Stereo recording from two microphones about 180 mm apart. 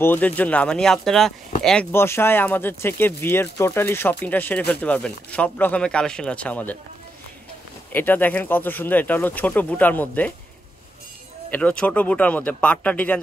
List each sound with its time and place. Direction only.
0.0 s speech: 10° left (ahead or behind)
7.9 s speech: 10° left (ahead or behind)
11.5 s speech: 5° left (ahead or behind)